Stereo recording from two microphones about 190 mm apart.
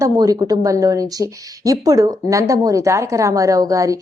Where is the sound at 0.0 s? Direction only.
20° right (ahead or behind).